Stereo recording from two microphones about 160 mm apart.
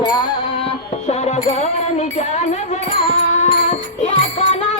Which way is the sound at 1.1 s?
40° left (ahead or behind).